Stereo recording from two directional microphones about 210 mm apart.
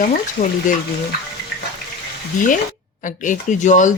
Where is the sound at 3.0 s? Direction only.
40° left (ahead or behind).